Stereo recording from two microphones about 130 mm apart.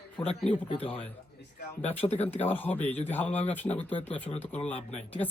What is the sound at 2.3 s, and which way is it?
Speech, 15° left (ahead or behind).